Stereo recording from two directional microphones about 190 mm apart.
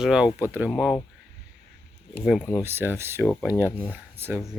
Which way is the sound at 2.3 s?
5° right (ahead or behind).